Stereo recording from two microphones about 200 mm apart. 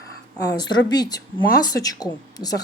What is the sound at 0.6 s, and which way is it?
Speech, 20° left (ahead or behind).